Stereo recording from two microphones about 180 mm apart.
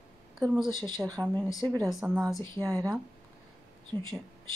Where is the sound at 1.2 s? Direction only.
20° right (ahead or behind).